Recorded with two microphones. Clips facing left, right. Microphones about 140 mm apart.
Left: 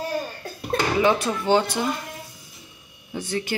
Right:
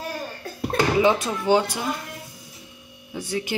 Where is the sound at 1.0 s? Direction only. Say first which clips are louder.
Even; 15° right (ahead or behind).